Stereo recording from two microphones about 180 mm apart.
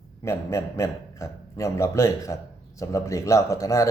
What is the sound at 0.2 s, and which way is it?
A man's voice, 15° left (ahead or behind).